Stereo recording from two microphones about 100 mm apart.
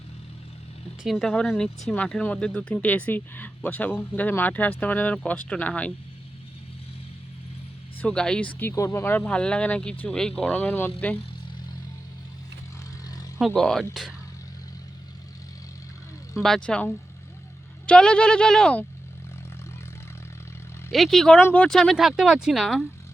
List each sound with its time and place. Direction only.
1.0 s speech: 5° left (ahead or behind)
8.0 s speech: 10° left (ahead or behind)
8.7 s speech: 30° left (ahead or behind)
13.6 s speech: centre (ahead or behind)
16.3 s speech: 5° left (ahead or behind)
20.9 s speech: centre (ahead or behind)
21.8 s speech: centre (ahead or behind)